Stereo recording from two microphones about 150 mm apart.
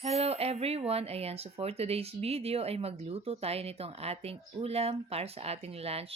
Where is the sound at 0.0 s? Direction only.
45° right (ahead or behind).